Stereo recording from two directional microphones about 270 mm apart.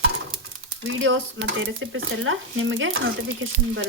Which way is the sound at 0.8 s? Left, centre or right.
Right.